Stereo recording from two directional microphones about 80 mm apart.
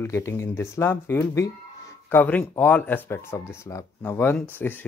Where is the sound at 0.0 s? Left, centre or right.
Left.